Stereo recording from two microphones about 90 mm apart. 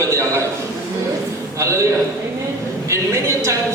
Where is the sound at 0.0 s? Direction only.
35° right (ahead or behind).